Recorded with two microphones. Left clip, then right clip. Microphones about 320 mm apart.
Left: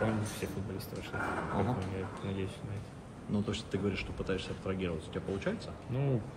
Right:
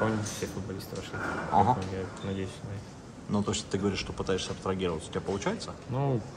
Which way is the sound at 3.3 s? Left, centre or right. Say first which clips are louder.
Right 5 dB; centre.